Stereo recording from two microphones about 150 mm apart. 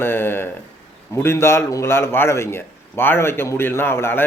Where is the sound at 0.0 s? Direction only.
15° left (ahead or behind).